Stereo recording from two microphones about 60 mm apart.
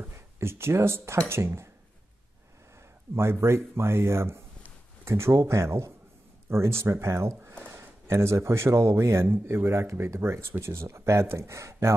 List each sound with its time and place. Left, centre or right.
0.4 s speech: right
3.2 s speech: right